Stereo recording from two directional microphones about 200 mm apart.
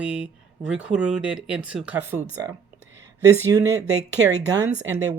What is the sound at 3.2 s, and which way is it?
Speech, 15° right (ahead or behind).